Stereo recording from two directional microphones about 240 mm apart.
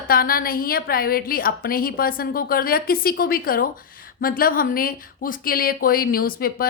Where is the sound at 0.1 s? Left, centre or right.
Left.